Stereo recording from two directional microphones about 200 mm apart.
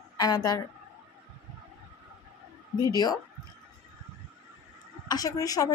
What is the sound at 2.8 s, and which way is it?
Speech, 20° left (ahead or behind).